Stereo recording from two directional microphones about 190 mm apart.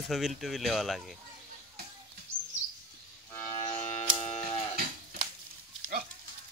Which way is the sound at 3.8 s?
15° left (ahead or behind).